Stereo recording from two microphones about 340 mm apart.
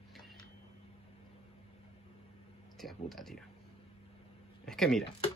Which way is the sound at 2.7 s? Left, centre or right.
Centre.